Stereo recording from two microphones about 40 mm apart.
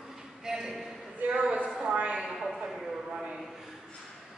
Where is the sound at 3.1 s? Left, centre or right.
Centre.